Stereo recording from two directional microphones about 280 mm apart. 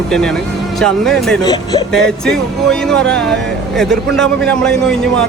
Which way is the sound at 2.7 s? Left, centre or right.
Centre.